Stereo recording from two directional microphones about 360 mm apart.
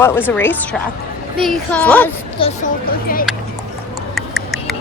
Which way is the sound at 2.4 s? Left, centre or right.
Centre.